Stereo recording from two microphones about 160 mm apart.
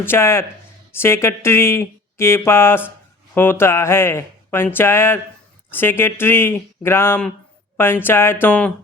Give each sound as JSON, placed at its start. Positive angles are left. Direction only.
{"t": 0.0, "sound": "speech", "side_deg": 15}